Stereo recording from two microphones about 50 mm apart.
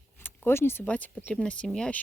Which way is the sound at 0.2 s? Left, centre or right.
Left.